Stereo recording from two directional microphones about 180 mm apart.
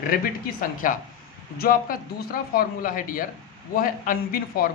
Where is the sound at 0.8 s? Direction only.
45° left (ahead or behind).